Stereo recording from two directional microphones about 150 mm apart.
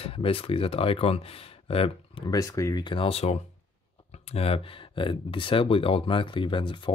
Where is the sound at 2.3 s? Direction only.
25° left (ahead or behind).